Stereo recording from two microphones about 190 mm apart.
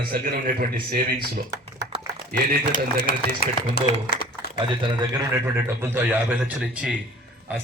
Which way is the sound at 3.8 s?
55° left (ahead or behind).